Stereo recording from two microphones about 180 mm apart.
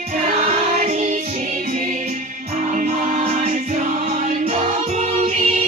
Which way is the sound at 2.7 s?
45° right (ahead or behind).